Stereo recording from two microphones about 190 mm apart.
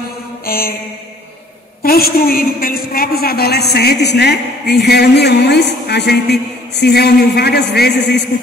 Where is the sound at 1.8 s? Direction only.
50° left (ahead or behind).